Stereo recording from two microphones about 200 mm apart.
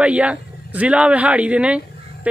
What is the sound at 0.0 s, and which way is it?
A man's voice, 5° right (ahead or behind).